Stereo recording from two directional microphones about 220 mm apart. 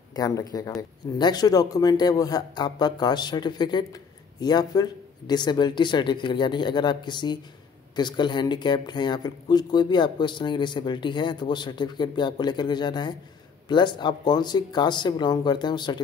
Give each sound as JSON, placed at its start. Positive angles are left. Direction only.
{"t": 0.1, "sound": "a man's voice", "side_deg": 15}